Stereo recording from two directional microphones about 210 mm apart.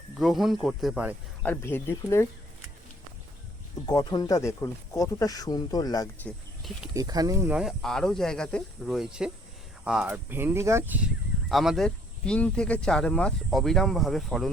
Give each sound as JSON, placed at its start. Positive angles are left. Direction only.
{"t": 0.2, "sound": "speech", "side_deg": 0}
{"t": 1.4, "sound": "speech", "side_deg": 10}
{"t": 3.8, "sound": "speech", "side_deg": 20}
{"t": 6.2, "sound": "speech", "side_deg": 0}
{"t": 6.9, "sound": "speech", "side_deg": -15}